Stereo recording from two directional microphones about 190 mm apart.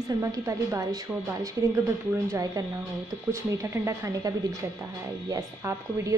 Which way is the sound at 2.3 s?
20° right (ahead or behind).